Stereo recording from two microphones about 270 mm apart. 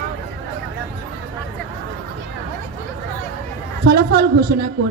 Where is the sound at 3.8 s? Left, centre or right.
Right.